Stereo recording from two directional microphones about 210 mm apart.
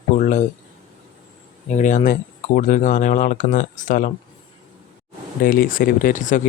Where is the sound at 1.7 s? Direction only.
35° left (ahead or behind).